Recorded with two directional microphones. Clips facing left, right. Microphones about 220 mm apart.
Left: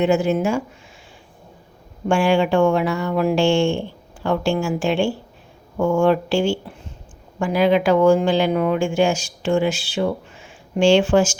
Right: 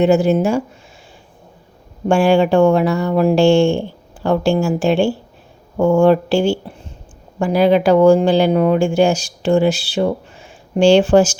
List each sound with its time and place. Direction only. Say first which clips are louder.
0.0 s speech: right 4 dB; 35° right (ahead or behind)
2.0 s speech: right 4 dB; 40° right (ahead or behind)